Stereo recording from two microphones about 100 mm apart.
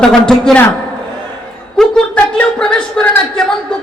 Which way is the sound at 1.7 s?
5° left (ahead or behind).